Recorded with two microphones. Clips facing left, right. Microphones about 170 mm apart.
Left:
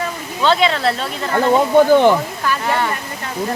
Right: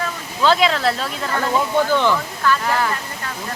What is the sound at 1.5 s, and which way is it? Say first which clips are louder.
Speech: left 7 dB; 50° left (ahead or behind).